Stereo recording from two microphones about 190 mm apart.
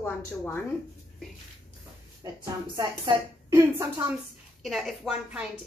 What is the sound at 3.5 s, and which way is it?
Speech, 15° right (ahead or behind).